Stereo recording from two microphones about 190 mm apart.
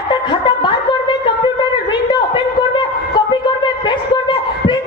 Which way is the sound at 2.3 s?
25° left (ahead or behind).